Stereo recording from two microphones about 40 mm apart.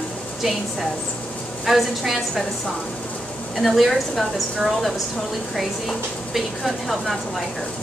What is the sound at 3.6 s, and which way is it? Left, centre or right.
Speech, centre.